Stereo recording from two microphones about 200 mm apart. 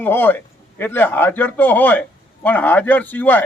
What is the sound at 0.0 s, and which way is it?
A man's voice, 10° left (ahead or behind).